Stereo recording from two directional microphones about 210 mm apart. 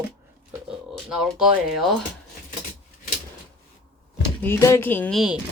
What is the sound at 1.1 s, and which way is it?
Speech, 5° right (ahead or behind).